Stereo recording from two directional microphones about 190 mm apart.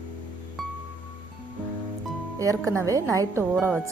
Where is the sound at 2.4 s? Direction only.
15° right (ahead or behind).